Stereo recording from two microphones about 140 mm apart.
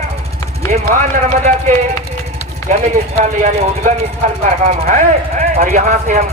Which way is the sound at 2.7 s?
55° right (ahead or behind).